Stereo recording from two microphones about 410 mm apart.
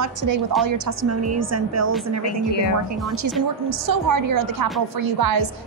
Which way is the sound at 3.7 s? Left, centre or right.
Right.